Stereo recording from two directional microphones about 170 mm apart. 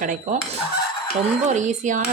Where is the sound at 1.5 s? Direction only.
45° right (ahead or behind).